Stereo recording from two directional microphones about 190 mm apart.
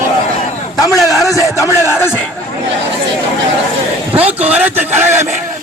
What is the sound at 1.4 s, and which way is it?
Speech, 15° left (ahead or behind).